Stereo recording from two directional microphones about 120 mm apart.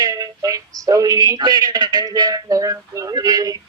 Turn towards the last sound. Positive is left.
turn(degrees=-30)  # may be behind; listen again after turning